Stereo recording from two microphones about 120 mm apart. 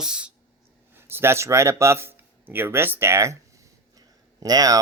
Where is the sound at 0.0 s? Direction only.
5° right (ahead or behind).